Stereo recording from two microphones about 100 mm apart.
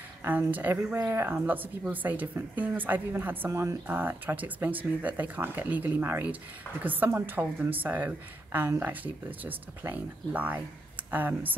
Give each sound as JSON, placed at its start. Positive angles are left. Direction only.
{"t": 0.2, "sound": "speech", "side_deg": -20}